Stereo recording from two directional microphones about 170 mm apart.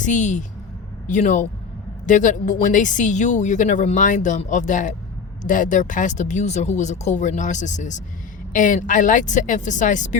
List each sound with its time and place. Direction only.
0.0 s a woman's voice: 45° left (ahead or behind)